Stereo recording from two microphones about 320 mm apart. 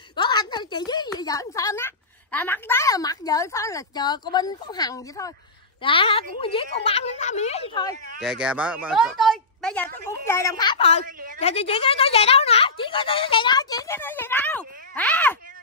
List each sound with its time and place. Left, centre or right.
0.1 s a woman's voice: centre
8.2 s a woman's voice: centre